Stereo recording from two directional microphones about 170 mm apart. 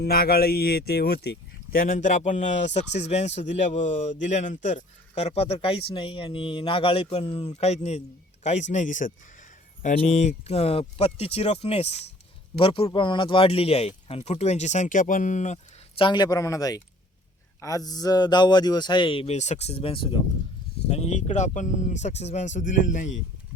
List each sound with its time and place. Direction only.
0.0 s speech: 65° left (ahead or behind); by 15.6 s 45° left (ahead or behind)
16.0 s a man's voice: 25° left (ahead or behind); by 23.2 s 45° left (ahead or behind)